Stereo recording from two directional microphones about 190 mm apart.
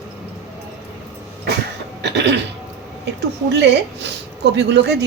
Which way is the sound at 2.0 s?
65° right (ahead or behind).